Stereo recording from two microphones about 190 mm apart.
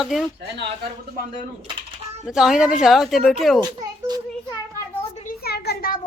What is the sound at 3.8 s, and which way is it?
Children playing, 20° right (ahead or behind).